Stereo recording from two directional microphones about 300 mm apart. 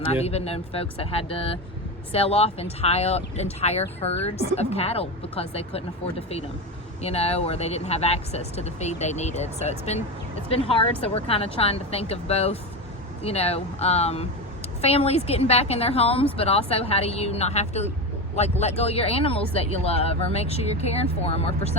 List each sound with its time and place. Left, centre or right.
0.1 s speech: left